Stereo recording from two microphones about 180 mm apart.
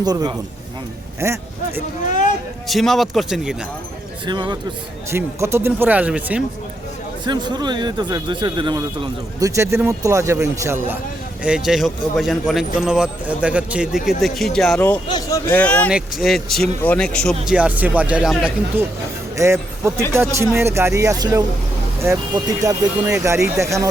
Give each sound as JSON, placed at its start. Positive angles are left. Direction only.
{"t": 0.0, "sound": "a man's voice", "side_deg": -20}
{"t": 2.6, "sound": "speech", "side_deg": 0}
{"t": 4.3, "sound": "speech", "side_deg": -25}
{"t": 5.1, "sound": "a man's voice", "side_deg": -15}
{"t": 7.3, "sound": "a man's voice", "side_deg": -25}
{"t": 15.0, "sound": "speech", "side_deg": 25}
{"t": 15.4, "sound": "speech", "side_deg": 10}
{"t": 15.9, "sound": "speech", "side_deg": -5}
{"t": 17.5, "sound": "a man's voice", "side_deg": -10}
{"t": 19.4, "sound": "a man's voice", "side_deg": -15}